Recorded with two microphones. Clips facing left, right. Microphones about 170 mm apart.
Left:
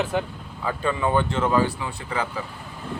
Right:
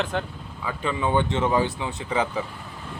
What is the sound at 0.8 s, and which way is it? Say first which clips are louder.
Speech: left 1 dB; 20° right (ahead or behind).